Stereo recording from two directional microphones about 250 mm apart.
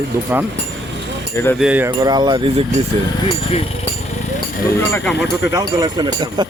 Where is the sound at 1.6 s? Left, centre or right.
Centre.